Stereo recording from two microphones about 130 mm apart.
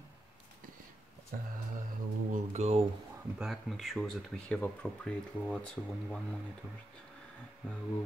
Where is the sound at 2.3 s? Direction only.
60° right (ahead or behind).